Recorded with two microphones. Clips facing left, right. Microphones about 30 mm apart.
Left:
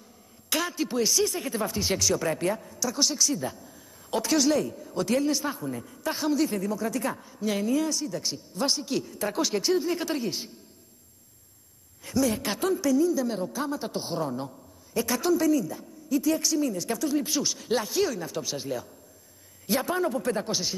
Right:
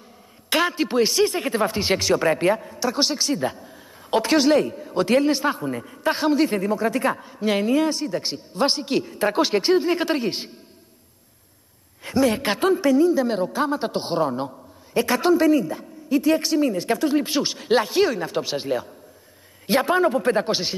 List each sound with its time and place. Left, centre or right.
0.5 s a man's voice: right
12.0 s a man's voice: right